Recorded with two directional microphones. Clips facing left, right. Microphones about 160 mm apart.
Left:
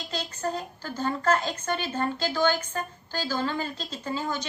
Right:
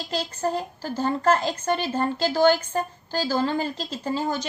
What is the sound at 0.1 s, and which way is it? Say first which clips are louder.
A woman's voice: right 5 dB; 35° right (ahead or behind).